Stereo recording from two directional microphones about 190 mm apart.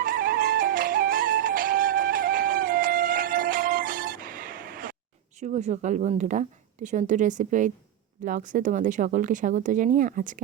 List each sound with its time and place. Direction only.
0.0 s music: 50° right (ahead or behind)
5.4 s speech: 35° right (ahead or behind)